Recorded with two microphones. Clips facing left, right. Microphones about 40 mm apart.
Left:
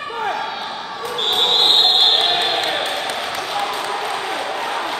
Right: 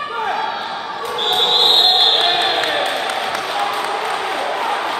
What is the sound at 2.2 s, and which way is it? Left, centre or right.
Basketball bounce, centre.